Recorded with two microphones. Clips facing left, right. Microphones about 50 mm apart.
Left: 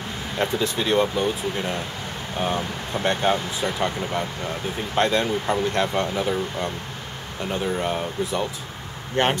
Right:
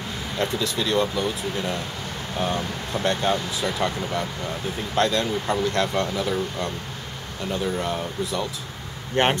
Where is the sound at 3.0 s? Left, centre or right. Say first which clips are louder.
Left 2 dB; left.